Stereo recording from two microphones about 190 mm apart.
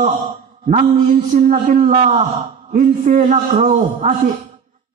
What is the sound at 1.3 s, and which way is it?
A man's voice, 40° right (ahead or behind).